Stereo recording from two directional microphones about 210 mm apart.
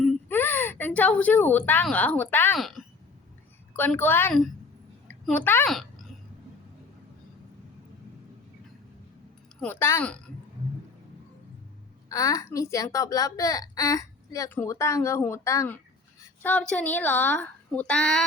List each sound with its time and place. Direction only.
0.0 s a woman's voice: 10° left (ahead or behind)
9.6 s a woman's voice: 10° left (ahead or behind)
12.0 s a woman's voice: 15° left (ahead or behind)